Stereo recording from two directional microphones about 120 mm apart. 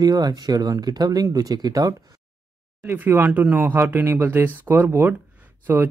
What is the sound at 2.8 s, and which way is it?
Speech, 20° right (ahead or behind).